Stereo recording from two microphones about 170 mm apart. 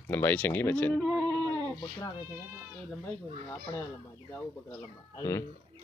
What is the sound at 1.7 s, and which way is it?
Speech, 20° left (ahead or behind).